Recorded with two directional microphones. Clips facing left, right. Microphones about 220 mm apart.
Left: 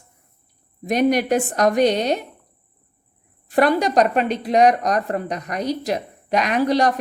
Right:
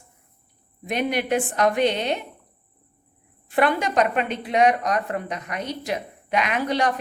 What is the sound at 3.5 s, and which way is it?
Speech, 40° left (ahead or behind).